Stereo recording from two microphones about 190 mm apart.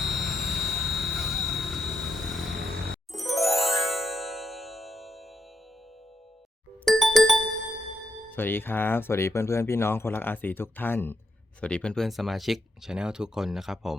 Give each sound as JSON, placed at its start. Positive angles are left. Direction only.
{"t": 0.0, "sound": "vehicle", "side_deg": 0}
{"t": 2.9, "sound": "music", "side_deg": 0}
{"t": 6.8, "sound": "music", "side_deg": 0}
{"t": 8.3, "sound": "speech", "side_deg": 10}